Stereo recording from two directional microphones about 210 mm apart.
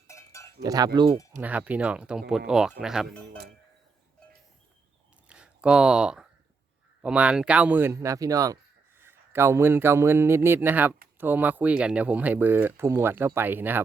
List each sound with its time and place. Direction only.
0.1 s cowbell: 15° left (ahead or behind)
0.6 s speech: 15° right (ahead or behind)
1.4 s speech: 5° right (ahead or behind)
5.3 s speech: 5° right (ahead or behind)